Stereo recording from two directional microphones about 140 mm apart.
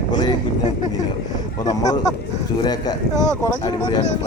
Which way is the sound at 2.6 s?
30° left (ahead or behind).